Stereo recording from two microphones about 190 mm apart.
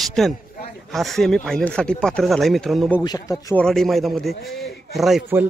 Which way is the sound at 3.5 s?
5° left (ahead or behind).